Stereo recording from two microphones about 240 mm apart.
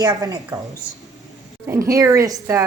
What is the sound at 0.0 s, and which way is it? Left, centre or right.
Speech, centre.